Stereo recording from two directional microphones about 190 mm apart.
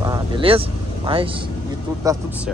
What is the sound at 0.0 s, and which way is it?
Vehicle, 25° right (ahead or behind).